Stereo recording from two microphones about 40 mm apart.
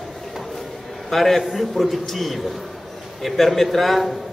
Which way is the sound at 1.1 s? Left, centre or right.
Centre.